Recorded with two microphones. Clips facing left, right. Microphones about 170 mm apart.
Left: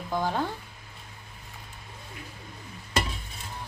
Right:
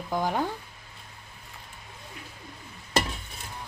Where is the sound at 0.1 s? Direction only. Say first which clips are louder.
Right 1 dB; 15° right (ahead or behind).